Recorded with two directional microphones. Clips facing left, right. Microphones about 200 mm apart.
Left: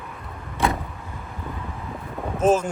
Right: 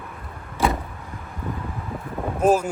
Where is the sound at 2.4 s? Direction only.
10° right (ahead or behind).